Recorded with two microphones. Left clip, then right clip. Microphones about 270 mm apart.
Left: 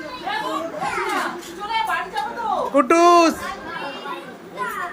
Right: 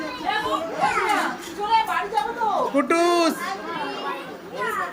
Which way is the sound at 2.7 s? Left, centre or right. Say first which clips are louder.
Left 9 dB; centre.